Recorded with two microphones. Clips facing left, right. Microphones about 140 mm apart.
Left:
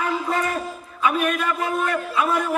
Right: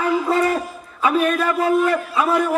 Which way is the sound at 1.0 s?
35° right (ahead or behind).